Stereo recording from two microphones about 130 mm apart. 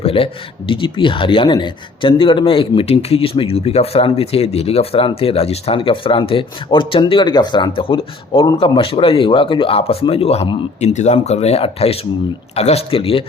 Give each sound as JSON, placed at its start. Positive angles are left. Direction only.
{"t": 0.0, "sound": "speech", "side_deg": 45}